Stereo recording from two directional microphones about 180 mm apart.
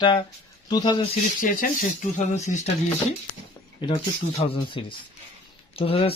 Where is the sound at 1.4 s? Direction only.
50° left (ahead or behind).